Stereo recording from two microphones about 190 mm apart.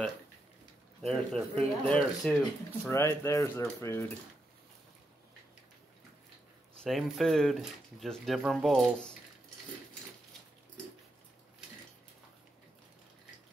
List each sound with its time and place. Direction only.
1.0 s speech: 5° left (ahead or behind)
6.8 s speech: centre (ahead or behind)